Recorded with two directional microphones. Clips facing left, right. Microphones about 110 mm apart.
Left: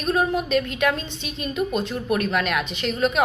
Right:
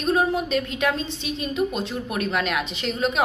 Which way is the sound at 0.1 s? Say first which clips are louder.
Left 1 dB; 25° right (ahead or behind).